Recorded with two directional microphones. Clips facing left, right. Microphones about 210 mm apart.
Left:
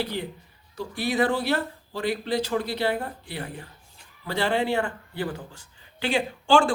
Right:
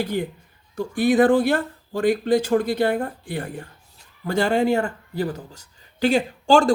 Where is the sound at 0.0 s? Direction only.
50° right (ahead or behind).